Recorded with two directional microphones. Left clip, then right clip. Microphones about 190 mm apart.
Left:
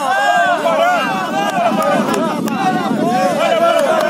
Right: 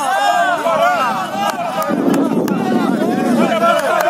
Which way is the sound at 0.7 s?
20° right (ahead or behind).